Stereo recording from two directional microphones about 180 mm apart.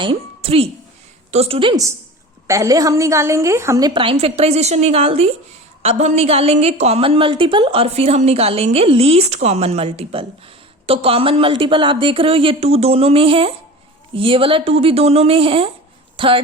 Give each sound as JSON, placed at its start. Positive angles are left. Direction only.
{"t": 0.0, "sound": "a woman's voice", "side_deg": -30}